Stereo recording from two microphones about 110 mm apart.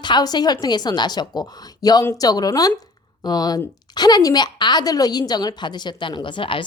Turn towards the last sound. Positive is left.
turn(degrees=50)  # may be behind; listen again after turning